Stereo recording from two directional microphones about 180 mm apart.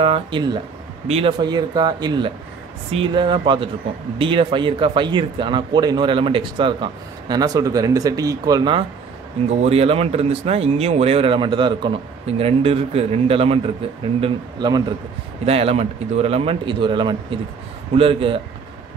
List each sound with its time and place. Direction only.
0.0 s speech: 30° right (ahead or behind)
1.4 s speech: 25° right (ahead or behind)